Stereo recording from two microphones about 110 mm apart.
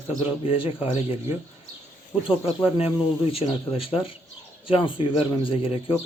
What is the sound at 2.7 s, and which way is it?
Speech, 60° left (ahead or behind).